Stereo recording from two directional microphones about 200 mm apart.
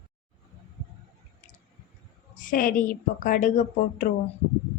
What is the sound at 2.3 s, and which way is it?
A woman's voice, 45° left (ahead or behind).